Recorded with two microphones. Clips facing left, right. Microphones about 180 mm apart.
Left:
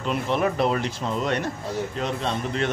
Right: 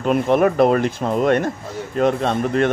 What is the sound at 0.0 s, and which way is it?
A man's voice, 50° right (ahead or behind).